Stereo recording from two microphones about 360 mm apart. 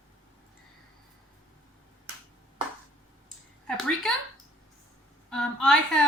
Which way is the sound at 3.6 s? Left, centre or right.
Centre.